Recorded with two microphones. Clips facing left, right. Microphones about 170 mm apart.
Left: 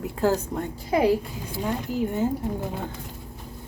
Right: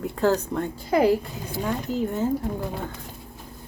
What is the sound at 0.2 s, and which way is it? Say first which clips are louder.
A woman's voice: right 1 dB; 10° left (ahead or behind).